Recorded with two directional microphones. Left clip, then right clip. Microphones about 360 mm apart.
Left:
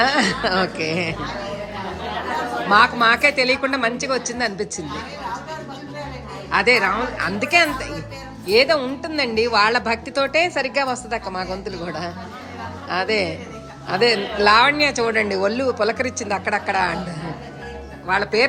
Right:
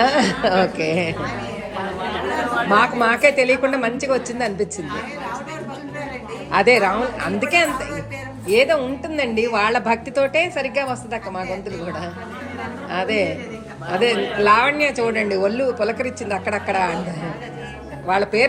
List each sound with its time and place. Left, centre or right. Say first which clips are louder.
0.0 s a woman's voice: right 1 dB; centre
2.6 s a woman's voice: left 3 dB; centre
6.5 s a woman's voice: right 2 dB; centre
12.9 s a woman's voice: even; centre
18.1 s a woman's voice: right 1 dB; centre